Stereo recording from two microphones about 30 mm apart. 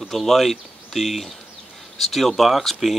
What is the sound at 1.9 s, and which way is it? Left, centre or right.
Speech, centre.